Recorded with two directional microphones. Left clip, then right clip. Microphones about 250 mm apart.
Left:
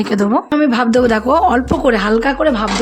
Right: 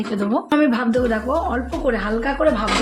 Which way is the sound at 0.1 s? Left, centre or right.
Left.